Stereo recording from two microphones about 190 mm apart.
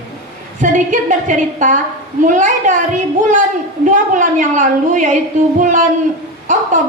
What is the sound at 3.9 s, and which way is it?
A woman's voice, 40° right (ahead or behind).